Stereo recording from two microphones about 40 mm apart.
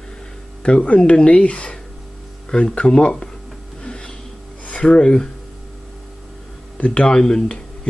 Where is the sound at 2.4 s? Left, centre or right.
Centre.